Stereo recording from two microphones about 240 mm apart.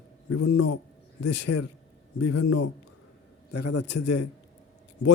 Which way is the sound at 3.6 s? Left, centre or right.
Left.